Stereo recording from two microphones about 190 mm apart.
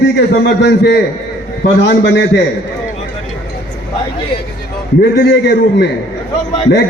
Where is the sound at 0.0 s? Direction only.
60° left (ahead or behind).